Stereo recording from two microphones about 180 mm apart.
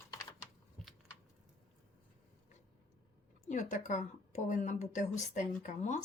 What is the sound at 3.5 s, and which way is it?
A woman's voice, 45° left (ahead or behind).